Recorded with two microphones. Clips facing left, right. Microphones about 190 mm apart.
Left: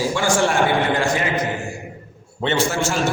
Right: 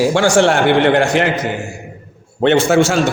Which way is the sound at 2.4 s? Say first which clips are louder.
Right 9 dB; 60° right (ahead or behind).